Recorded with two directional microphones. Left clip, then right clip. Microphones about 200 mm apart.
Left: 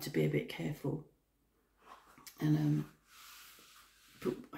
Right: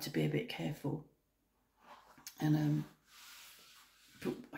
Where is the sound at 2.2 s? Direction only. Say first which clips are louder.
Even; 10° right (ahead or behind).